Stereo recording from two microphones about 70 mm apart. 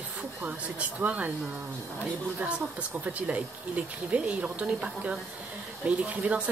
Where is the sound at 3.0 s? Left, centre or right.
Right.